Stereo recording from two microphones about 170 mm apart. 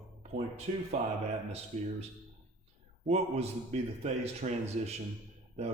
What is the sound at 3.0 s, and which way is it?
Speech, 40° right (ahead or behind).